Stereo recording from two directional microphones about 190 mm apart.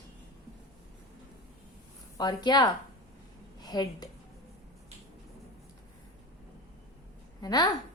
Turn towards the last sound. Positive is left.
turn(degrees=20)  # may be behind; listen again after turning